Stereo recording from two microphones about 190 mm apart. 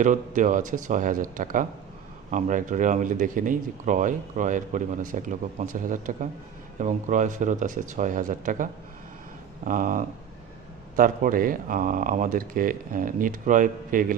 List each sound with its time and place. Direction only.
0.0 s speech: 40° right (ahead or behind)